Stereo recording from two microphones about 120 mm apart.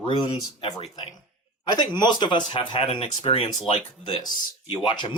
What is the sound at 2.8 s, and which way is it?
Speech, 55° left (ahead or behind).